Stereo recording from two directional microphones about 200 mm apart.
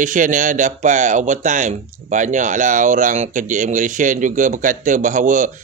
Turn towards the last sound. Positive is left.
turn(degrees=-40)  # may be behind; listen again after turning